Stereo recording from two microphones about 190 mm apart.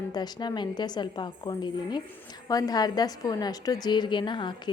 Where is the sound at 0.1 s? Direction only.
20° left (ahead or behind).